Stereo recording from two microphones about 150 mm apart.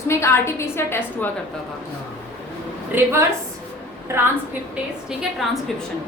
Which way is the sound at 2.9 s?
15° right (ahead or behind).